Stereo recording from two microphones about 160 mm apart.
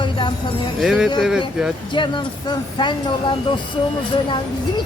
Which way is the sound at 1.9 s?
30° left (ahead or behind).